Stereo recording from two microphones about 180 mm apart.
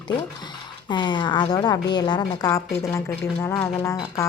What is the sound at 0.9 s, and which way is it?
A woman's voice, 25° left (ahead or behind).